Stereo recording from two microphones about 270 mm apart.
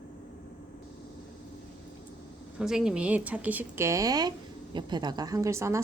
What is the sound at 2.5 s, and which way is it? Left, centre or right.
A woman's voice, centre.